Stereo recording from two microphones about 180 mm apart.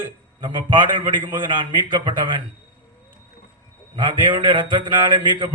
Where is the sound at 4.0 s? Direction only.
25° right (ahead or behind).